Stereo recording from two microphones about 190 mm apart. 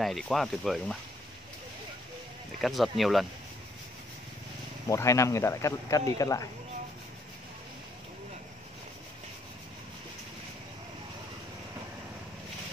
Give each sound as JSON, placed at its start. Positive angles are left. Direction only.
{"t": 0.0, "sound": "speech", "side_deg": 0}
{"t": 2.6, "sound": "speech", "side_deg": 0}
{"t": 4.8, "sound": "speech", "side_deg": 15}